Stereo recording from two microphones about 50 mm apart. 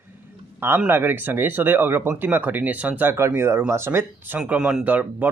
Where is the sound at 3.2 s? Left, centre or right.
Right.